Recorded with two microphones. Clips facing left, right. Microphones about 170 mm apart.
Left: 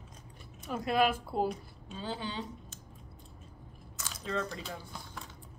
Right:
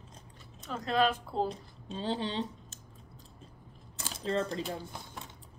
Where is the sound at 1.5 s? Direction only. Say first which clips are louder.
Even; 30° right (ahead or behind).